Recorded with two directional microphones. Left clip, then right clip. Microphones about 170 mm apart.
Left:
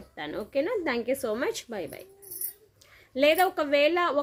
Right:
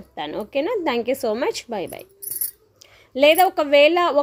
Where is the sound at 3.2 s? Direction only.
30° right (ahead or behind).